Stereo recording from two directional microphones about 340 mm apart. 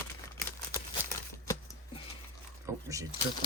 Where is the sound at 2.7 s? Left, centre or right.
Centre.